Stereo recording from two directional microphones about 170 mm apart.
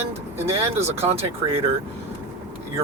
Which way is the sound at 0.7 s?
40° right (ahead or behind).